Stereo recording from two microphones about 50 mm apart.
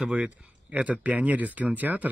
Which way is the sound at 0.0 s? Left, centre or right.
Centre.